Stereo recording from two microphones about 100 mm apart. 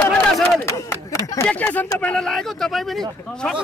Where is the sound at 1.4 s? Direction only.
15° left (ahead or behind).